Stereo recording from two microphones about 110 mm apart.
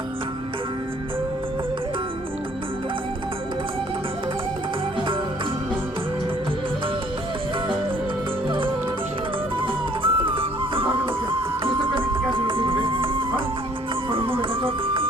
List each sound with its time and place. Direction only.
8.4 s music: 50° right (ahead or behind)